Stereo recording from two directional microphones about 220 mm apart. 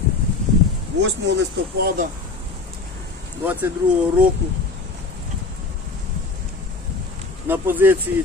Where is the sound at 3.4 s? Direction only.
10° right (ahead or behind).